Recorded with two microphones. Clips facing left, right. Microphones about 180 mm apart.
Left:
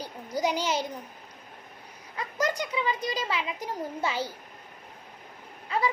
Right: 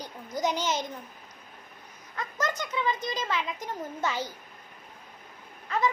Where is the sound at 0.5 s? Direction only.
35° left (ahead or behind).